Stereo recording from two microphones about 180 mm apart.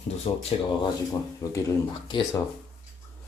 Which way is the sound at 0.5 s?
35° left (ahead or behind).